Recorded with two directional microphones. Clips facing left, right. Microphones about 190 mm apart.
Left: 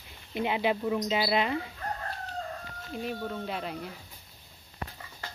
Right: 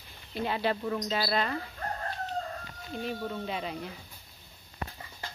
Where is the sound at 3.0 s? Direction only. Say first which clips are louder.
Even; 5° left (ahead or behind).